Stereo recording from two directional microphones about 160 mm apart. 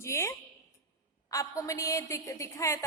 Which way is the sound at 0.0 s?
15° left (ahead or behind).